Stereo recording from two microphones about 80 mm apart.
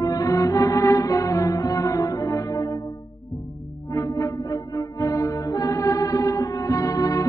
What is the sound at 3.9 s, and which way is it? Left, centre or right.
Music, left.